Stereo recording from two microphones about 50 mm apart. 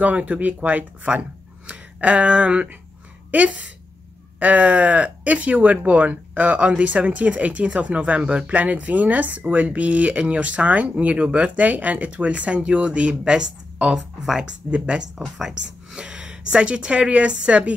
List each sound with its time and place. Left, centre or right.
0.0 s speech: right
1.7 s a sound: right
3.3 s speech: right; by 14.4 s centre
14.4 s speech: centre